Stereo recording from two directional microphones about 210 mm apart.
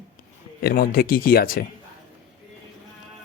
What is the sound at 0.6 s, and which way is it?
Speech, 45° left (ahead or behind).